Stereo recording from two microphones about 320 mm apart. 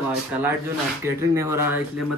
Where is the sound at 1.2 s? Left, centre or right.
Centre.